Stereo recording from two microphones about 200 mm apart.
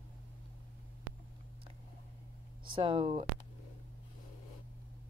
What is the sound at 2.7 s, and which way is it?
Speech, 25° right (ahead or behind).